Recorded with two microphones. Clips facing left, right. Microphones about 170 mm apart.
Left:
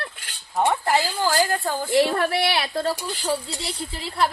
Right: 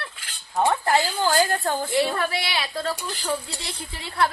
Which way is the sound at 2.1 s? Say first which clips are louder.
Left 4 dB; 55° left (ahead or behind).